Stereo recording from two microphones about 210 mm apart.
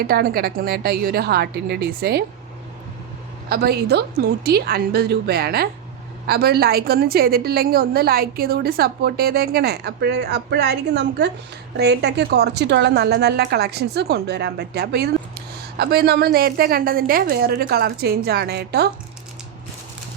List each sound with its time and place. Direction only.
0.1 s a woman's voice: 45° right (ahead or behind)
3.5 s a woman's voice: 50° right (ahead or behind)